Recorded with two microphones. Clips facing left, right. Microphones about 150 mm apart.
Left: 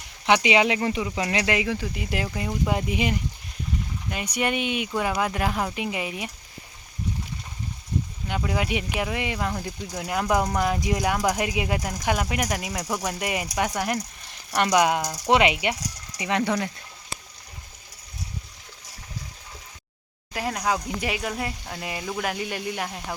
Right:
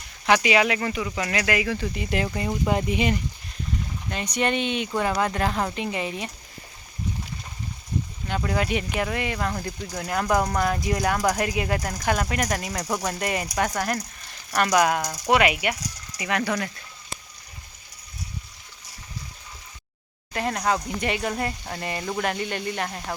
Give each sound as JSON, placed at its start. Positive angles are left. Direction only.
{"t": 0.3, "sound": "speech", "side_deg": 20}
{"t": 8.3, "sound": "speech", "side_deg": 10}
{"t": 20.3, "sound": "speech", "side_deg": 5}